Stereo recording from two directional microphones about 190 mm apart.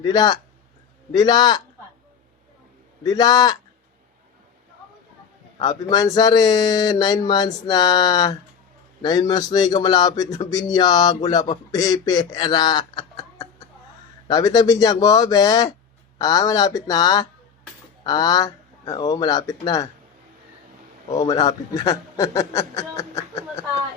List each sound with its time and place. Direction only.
0.0 s speech: 20° left (ahead or behind)
3.0 s speech: 20° left (ahead or behind)
5.5 s speech: 20° left (ahead or behind)
21.1 s a man's voice: 20° left (ahead or behind)